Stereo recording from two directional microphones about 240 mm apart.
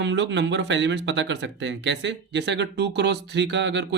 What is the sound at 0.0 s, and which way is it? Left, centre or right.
Speech, right.